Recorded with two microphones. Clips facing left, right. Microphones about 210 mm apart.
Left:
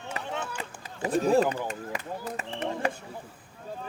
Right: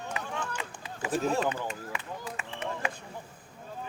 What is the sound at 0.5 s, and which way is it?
Run, 40° left (ahead or behind).